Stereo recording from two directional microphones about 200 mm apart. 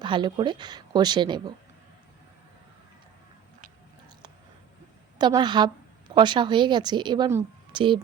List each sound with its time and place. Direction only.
0.0 s speech: 25° right (ahead or behind)
5.1 s a woman's voice: 20° right (ahead or behind)